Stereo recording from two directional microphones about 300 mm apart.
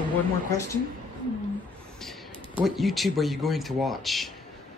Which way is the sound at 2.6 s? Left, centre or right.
Centre.